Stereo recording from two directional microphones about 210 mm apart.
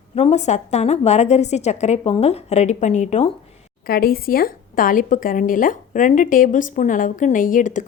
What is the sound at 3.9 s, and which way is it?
Speech, 45° left (ahead or behind).